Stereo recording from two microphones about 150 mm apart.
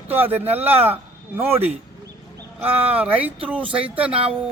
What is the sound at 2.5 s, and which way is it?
A man's voice, 10° right (ahead or behind).